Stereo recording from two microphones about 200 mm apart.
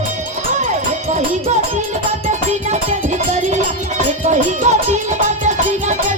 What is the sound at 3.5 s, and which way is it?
Music, 35° right (ahead or behind).